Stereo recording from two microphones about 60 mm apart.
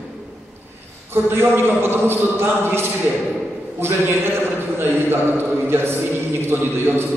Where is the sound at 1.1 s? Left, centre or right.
Right.